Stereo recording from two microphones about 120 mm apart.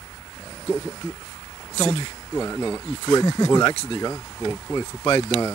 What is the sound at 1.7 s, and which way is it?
Speech, 60° left (ahead or behind).